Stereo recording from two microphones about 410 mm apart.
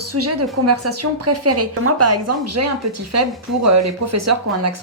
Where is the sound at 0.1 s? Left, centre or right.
Right.